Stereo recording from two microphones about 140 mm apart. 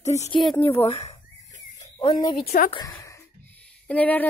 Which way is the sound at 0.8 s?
40° left (ahead or behind).